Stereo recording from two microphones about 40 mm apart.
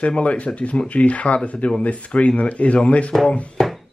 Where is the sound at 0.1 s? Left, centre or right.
Left.